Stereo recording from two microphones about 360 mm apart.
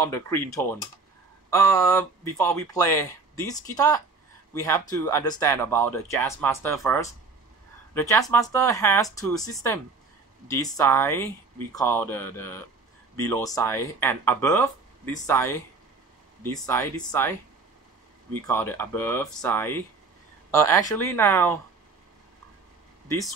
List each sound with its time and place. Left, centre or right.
0.0 s speech: centre